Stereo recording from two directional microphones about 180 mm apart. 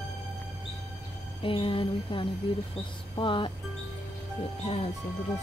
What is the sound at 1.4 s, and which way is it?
Speech, 30° left (ahead or behind).